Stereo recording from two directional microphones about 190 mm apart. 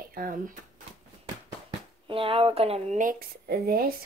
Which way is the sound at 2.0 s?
30° right (ahead or behind).